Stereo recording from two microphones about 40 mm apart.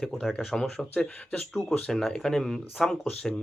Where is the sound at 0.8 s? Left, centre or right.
Centre.